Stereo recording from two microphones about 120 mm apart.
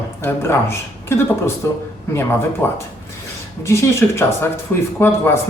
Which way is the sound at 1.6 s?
25° left (ahead or behind).